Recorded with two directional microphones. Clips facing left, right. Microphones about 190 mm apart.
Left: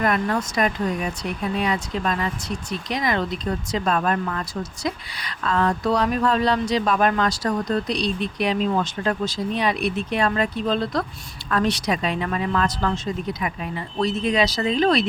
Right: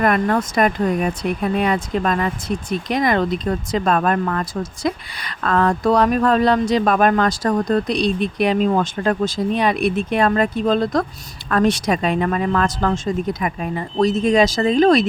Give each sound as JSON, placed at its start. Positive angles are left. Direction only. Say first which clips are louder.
{"t": 0.0, "sound": "speech", "louder": "right 5 dB", "side_deg": -55}